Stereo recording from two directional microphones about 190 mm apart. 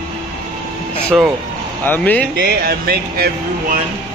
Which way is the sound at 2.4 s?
55° right (ahead or behind).